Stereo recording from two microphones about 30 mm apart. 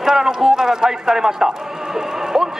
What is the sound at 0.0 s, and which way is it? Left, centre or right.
A man's voice, centre.